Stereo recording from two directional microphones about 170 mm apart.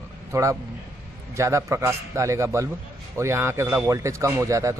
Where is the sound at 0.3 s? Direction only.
20° right (ahead or behind).